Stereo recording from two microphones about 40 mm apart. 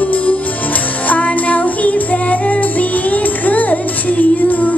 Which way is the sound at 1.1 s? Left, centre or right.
Left.